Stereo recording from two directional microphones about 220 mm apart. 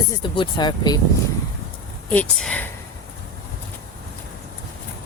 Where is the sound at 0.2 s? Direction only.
20° left (ahead or behind).